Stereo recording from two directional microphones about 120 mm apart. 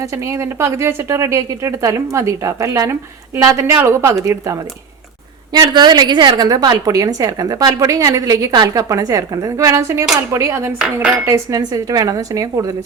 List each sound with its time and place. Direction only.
0.0 s a woman's voice: 25° right (ahead or behind)
5.5 s a woman's voice: 35° right (ahead or behind)